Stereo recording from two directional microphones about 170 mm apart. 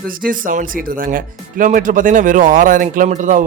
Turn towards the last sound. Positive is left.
turn(degrees=-50)  # may be behind; listen again after turning